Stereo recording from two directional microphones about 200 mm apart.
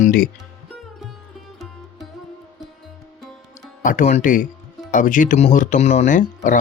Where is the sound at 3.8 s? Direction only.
40° left (ahead or behind).